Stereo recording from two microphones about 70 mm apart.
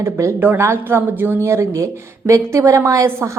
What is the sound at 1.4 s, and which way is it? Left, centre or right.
A woman's voice, right.